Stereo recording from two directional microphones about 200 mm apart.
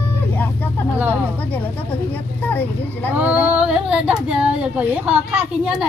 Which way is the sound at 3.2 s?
10° right (ahead or behind).